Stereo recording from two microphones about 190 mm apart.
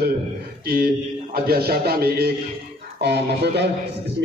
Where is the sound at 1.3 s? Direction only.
55° right (ahead or behind).